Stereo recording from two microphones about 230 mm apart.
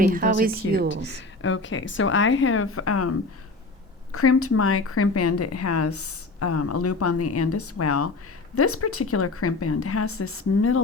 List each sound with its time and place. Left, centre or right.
0.0 s a woman's voice: right
1.4 s speech: left
4.1 s speech: left